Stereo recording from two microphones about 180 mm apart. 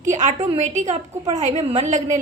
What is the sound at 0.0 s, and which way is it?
A woman's voice, 40° right (ahead or behind).